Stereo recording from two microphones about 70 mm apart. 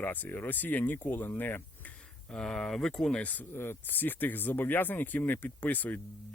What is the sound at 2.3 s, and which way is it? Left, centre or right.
Speech, centre.